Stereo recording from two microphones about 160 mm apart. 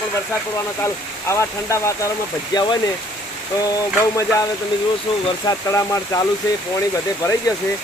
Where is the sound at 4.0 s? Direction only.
20° left (ahead or behind).